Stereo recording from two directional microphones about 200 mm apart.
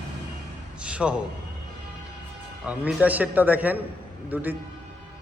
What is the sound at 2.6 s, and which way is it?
A man's voice, 5° right (ahead or behind).